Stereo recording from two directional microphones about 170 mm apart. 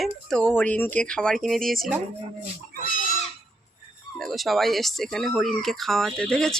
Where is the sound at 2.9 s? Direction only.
50° left (ahead or behind).